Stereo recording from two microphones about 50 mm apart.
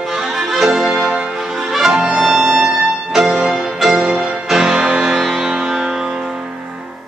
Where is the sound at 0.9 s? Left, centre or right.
Right.